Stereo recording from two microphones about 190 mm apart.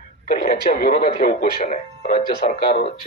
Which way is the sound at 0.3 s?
45° left (ahead or behind).